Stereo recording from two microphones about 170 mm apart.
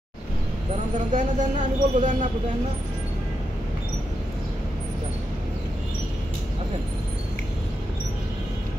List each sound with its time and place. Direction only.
1.1 s speech: 45° right (ahead or behind)